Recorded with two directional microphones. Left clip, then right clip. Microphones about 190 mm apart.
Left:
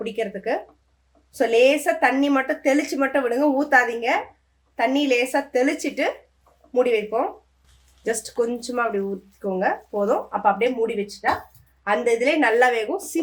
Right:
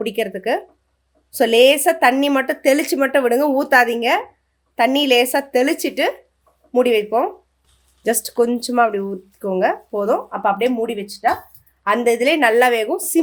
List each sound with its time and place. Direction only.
0.0 s speech: 45° right (ahead or behind)